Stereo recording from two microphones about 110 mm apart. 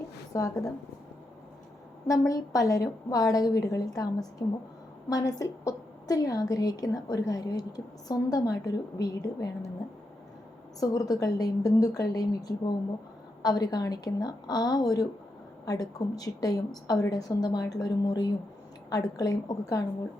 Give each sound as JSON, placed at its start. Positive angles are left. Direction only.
{"t": 0.3, "sound": "a woman's voice", "side_deg": 30}
{"t": 2.0, "sound": "a woman's voice", "side_deg": 30}
{"t": 10.8, "sound": "a woman's voice", "side_deg": 35}